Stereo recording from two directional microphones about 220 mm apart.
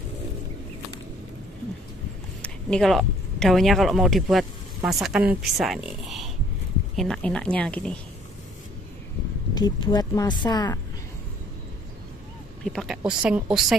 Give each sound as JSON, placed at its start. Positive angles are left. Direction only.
{"t": 2.4, "sound": "a woman's voice", "side_deg": 5}
{"t": 9.5, "sound": "speech", "side_deg": 15}
{"t": 12.6, "sound": "a woman's voice", "side_deg": 0}